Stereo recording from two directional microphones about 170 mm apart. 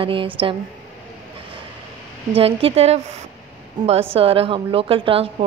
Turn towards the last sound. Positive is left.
turn(degrees=-35)  # may be behind; listen again after turning